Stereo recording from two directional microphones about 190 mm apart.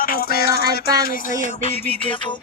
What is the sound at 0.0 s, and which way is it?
Music, 50° left (ahead or behind).